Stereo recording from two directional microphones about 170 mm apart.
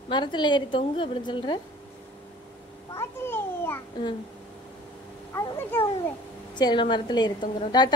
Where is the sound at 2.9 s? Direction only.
15° left (ahead or behind).